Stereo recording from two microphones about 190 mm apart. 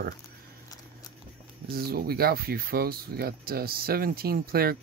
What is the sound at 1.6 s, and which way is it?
Speech, 55° right (ahead or behind).